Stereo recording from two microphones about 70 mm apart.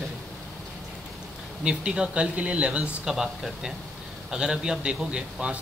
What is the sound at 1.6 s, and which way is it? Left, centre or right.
A man's voice, centre.